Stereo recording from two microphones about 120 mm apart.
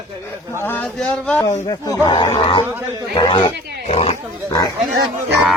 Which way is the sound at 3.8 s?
60° left (ahead or behind).